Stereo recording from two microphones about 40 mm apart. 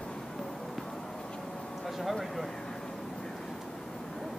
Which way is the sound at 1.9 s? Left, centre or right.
Centre.